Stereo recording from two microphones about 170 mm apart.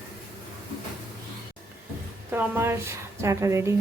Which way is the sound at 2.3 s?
15° right (ahead or behind).